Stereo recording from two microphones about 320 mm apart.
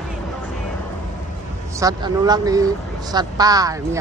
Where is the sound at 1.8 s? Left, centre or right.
Centre.